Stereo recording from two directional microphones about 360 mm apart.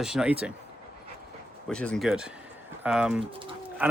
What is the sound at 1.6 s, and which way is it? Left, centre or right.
Speech, centre.